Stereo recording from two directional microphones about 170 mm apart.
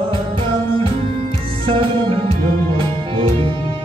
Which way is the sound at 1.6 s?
30° right (ahead or behind).